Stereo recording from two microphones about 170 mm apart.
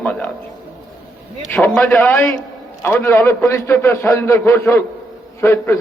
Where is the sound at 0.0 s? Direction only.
10° left (ahead or behind).